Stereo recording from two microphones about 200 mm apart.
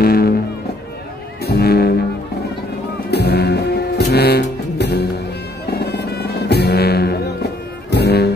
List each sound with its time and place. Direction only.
0.0 s music: 50° left (ahead or behind)
1.4 s music: 55° left (ahead or behind)
3.1 s music: 55° left (ahead or behind)